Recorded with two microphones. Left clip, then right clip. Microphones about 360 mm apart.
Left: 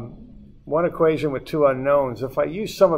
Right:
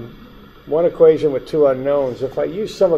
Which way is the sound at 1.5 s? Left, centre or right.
Left.